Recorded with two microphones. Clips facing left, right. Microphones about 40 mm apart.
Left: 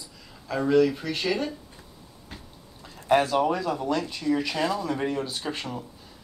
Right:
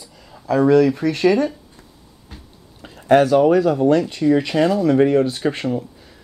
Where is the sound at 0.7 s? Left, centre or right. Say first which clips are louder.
Right 6 dB; right.